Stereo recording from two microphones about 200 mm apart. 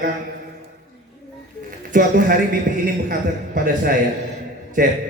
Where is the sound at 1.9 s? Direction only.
40° right (ahead or behind).